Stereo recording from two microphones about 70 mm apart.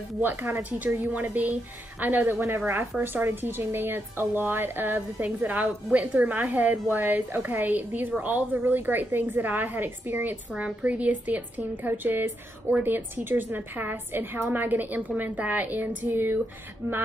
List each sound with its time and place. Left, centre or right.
0.2 s a woman's voice: right
16.8 s speech: right